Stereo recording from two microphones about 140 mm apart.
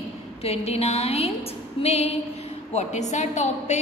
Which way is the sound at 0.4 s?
45° left (ahead or behind).